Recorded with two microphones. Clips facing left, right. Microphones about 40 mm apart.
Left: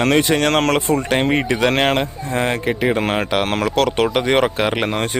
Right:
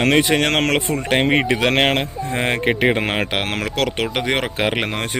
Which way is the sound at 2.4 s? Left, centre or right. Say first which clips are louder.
Even; right.